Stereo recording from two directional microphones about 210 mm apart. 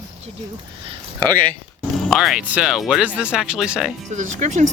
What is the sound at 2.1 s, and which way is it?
Speech, centre (ahead or behind).